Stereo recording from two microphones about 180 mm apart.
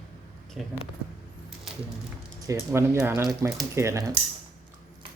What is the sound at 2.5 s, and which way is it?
Speech, 15° right (ahead or behind).